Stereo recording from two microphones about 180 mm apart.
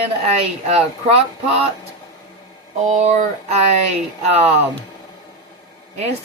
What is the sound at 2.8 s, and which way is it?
Speech, 40° right (ahead or behind).